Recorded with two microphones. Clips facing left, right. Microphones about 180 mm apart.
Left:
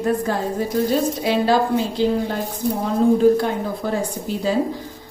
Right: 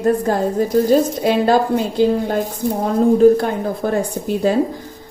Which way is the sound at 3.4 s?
55° right (ahead or behind).